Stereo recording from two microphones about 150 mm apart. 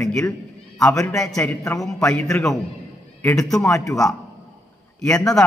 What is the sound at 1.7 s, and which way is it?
Speech, 5° left (ahead or behind).